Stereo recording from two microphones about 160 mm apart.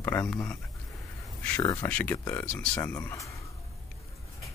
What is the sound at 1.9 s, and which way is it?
Speech, 10° left (ahead or behind).